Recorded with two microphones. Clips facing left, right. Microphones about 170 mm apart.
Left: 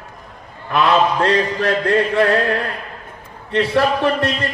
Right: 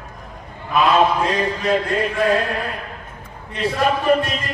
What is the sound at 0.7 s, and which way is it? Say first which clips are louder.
A man's voice: even; 70° left (ahead or behind).